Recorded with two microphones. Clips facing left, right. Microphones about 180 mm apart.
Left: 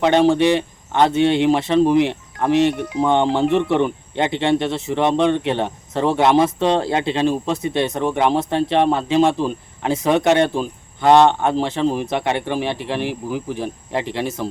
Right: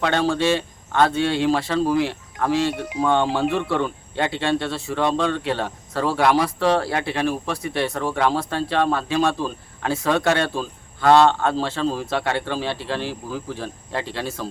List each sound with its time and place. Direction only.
0.0 s speech: 20° left (ahead or behind)